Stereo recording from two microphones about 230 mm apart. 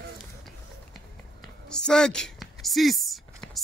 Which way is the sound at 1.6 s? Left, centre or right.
Centre.